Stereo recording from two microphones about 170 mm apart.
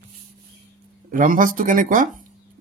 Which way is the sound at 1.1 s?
50° right (ahead or behind).